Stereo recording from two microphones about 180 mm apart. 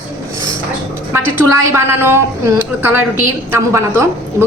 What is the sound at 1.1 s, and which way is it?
A woman's voice, 15° right (ahead or behind).